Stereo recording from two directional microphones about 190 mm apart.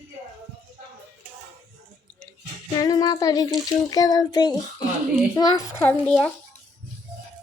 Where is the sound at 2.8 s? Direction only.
20° left (ahead or behind).